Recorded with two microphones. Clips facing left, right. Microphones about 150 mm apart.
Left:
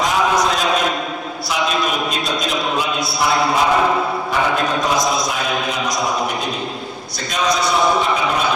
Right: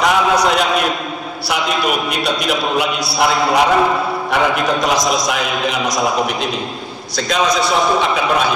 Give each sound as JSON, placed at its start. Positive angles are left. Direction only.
{"t": 0.0, "sound": "a sound", "side_deg": -65}
{"t": 2.4, "sound": "a man's voice", "side_deg": -70}
{"t": 4.8, "sound": "a man's voice", "side_deg": -85}